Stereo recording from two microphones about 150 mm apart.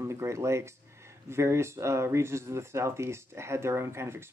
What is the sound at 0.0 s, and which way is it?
Speech, 20° right (ahead or behind).